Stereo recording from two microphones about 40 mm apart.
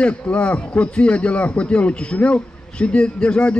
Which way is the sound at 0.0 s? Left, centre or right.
Left.